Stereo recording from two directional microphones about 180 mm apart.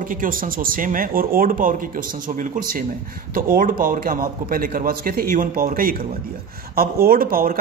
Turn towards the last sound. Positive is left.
turn(degrees=-55)  # may be behind; listen again after turning